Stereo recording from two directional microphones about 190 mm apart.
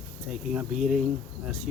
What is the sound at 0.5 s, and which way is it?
Speech, 5° right (ahead or behind).